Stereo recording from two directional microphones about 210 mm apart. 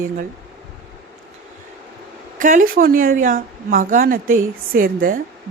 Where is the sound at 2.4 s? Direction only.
40° right (ahead or behind).